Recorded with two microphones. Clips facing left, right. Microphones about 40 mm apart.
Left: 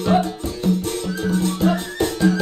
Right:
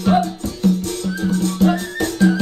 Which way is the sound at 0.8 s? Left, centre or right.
Left.